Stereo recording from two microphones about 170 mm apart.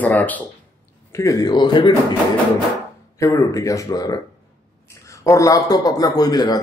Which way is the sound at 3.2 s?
20° left (ahead or behind).